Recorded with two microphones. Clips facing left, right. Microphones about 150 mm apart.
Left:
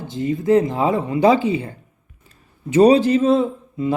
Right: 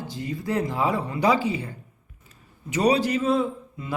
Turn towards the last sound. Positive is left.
turn(degrees=25)  # may be behind; listen again after turning